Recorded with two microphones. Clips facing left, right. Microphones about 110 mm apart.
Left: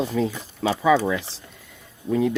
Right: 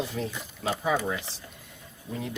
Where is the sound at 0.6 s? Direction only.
90° left.